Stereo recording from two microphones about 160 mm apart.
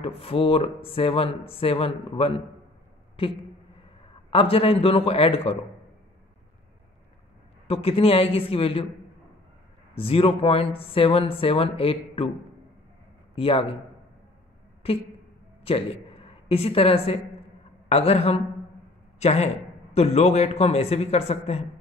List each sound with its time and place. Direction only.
0.0 s a man's voice: 35° left (ahead or behind)
7.6 s a man's voice: 35° left (ahead or behind)
9.9 s a man's voice: 35° left (ahead or behind)
13.3 s a man's voice: 35° left (ahead or behind)
15.6 s a woman's voice: 35° left (ahead or behind)